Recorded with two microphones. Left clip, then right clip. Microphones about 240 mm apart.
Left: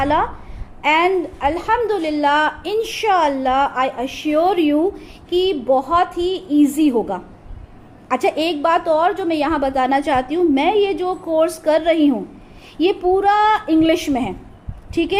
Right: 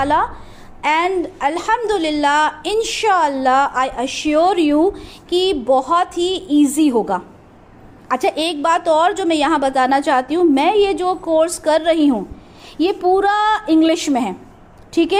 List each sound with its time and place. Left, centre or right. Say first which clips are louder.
0.0 s a woman's voice: right 1 dB; centre